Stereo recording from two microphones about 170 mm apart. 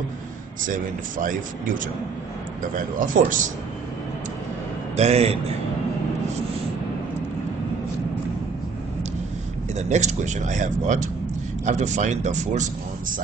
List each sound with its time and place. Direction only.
0.7 s speech: 50° right (ahead or behind)
2.7 s speech: 55° right (ahead or behind)
4.9 s a man's voice: 40° right (ahead or behind)
9.8 s speech: 45° right (ahead or behind)